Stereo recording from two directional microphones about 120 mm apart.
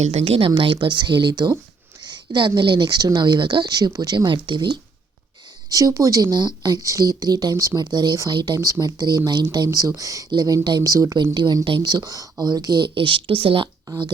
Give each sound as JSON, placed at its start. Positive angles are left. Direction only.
{"t": 0.0, "sound": "a woman's voice", "side_deg": -65}
{"t": 5.6, "sound": "a woman's voice", "side_deg": -30}